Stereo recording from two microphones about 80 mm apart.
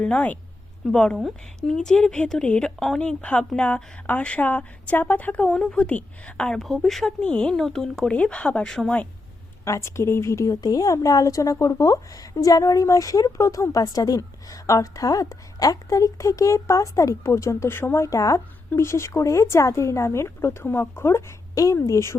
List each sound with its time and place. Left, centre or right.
0.0 s speech: centre
9.6 s a woman's voice: left